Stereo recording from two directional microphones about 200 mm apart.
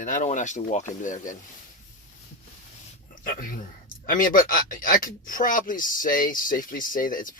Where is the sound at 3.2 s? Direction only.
45° left (ahead or behind).